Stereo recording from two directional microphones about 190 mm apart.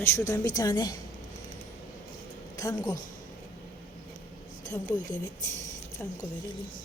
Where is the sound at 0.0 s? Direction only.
15° left (ahead or behind).